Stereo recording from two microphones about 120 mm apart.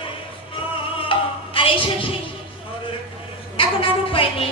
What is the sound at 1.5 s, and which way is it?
Speech, 45° left (ahead or behind).